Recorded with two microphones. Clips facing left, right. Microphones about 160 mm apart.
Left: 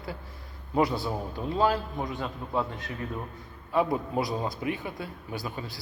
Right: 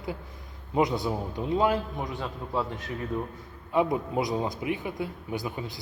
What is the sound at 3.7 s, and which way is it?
A man's voice, 20° right (ahead or behind).